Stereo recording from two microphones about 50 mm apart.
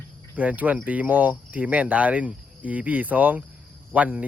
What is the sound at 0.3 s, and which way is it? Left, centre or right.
Speech, right.